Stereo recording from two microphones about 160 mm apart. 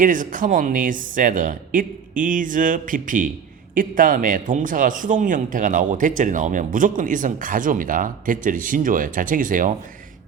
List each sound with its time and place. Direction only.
0.0 s a man's voice: 55° right (ahead or behind)